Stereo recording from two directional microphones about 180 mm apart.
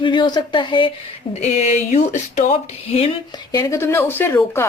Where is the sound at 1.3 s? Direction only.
40° left (ahead or behind).